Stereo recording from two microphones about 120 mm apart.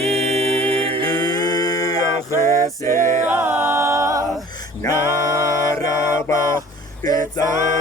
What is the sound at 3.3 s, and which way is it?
A capella, 15° right (ahead or behind).